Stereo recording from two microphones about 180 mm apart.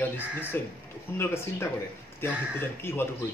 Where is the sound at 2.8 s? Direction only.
10° left (ahead or behind).